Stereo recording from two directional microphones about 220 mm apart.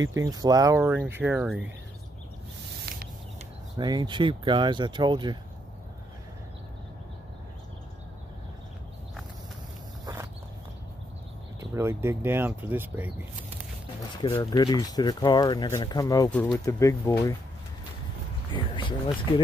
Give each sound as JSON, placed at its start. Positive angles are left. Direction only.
{"t": 0.0, "sound": "speech", "side_deg": -15}
{"t": 3.7, "sound": "speech", "side_deg": -20}
{"t": 11.7, "sound": "speech", "side_deg": -10}
{"t": 14.2, "sound": "speech", "side_deg": 20}
{"t": 18.5, "sound": "speech", "side_deg": 20}